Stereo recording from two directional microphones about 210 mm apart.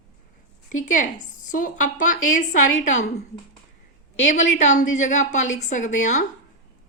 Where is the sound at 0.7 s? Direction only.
40° left (ahead or behind).